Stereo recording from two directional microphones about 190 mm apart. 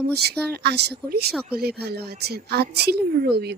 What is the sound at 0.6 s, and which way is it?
Speech, 60° right (ahead or behind).